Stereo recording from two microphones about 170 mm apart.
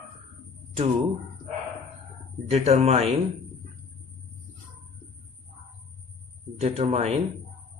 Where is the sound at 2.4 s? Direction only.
40° right (ahead or behind).